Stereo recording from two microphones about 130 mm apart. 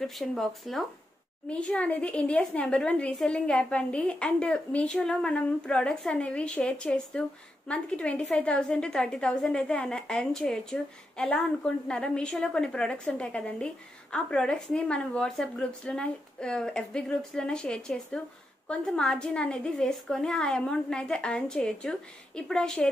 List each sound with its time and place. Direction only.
0.0 s a woman's voice: centre (ahead or behind)